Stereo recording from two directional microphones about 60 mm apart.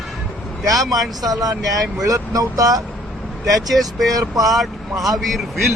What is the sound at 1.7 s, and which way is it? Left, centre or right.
Speech, right.